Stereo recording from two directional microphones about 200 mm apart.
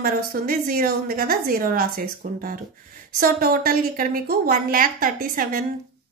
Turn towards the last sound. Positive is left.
turn(degrees=-45)  # may be behind; listen again after turning